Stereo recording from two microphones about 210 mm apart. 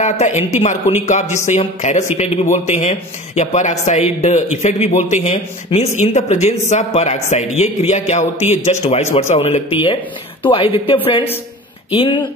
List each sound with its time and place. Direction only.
0.0 s speech: 35° left (ahead or behind)